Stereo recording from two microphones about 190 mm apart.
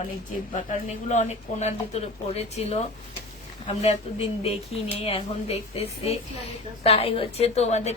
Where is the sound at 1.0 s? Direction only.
40° left (ahead or behind).